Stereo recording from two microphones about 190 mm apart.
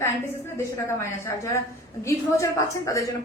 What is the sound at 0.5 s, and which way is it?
A woman's voice, 15° left (ahead or behind).